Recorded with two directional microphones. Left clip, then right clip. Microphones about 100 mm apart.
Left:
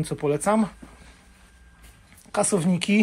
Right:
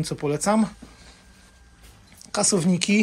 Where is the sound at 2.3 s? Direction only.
30° right (ahead or behind).